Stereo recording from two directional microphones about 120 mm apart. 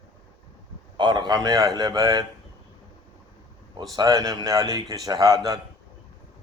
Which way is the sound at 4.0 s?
30° right (ahead or behind).